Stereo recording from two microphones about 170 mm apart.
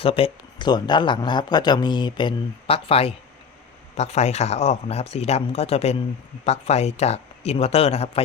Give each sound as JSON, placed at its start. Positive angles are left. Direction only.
{"t": 0.0, "sound": "speech", "side_deg": 35}